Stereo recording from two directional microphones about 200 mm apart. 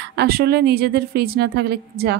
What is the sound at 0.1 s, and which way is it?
A woman's voice, 55° right (ahead or behind).